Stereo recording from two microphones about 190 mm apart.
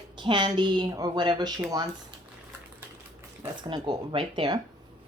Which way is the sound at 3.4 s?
20° right (ahead or behind).